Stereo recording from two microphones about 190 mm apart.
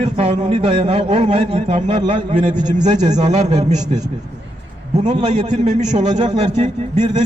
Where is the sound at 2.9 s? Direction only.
20° right (ahead or behind).